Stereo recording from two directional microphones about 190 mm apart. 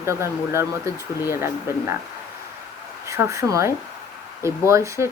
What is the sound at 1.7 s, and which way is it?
Speech, 15° right (ahead or behind).